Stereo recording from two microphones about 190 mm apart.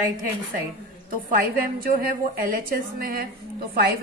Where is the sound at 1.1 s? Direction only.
50° right (ahead or behind).